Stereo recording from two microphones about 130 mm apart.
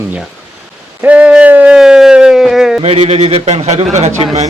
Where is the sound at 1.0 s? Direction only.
10° right (ahead or behind).